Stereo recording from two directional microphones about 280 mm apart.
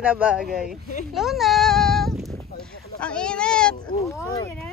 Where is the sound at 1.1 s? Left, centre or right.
Centre.